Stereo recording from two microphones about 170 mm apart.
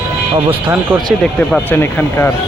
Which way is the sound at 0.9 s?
5° right (ahead or behind).